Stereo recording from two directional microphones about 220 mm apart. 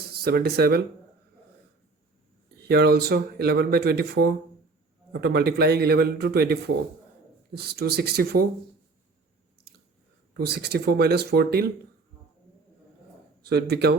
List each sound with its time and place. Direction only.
0.0 s speech: 45° right (ahead or behind)
2.6 s speech: 45° right (ahead or behind)
10.3 s speech: 45° right (ahead or behind)
13.4 s speech: 45° right (ahead or behind)